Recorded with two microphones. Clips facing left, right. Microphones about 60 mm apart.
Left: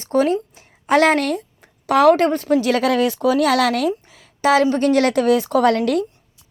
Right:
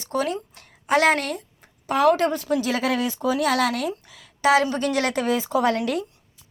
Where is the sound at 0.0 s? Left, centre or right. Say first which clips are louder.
Left 8 dB; left.